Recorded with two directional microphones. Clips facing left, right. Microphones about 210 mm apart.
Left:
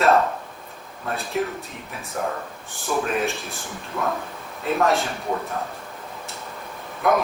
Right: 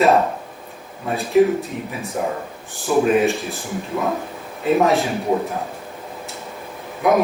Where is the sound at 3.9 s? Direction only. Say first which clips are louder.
Right 3 dB; 15° right (ahead or behind).